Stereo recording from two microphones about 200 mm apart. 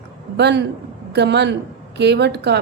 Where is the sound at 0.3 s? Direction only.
60° right (ahead or behind).